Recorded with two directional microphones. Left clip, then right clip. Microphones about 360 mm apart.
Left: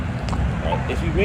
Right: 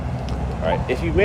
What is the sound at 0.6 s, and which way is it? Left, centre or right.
Speech, centre.